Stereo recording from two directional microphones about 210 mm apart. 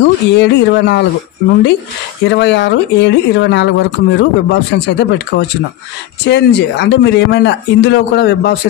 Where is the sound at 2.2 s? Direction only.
55° left (ahead or behind).